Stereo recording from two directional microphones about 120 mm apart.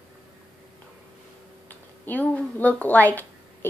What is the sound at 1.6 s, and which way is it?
A woman's voice, 15° left (ahead or behind).